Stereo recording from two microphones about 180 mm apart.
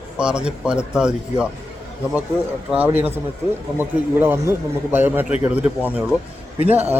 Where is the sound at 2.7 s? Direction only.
10° right (ahead or behind).